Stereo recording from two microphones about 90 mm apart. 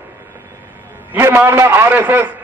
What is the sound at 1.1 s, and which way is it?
A man's voice, 25° right (ahead or behind).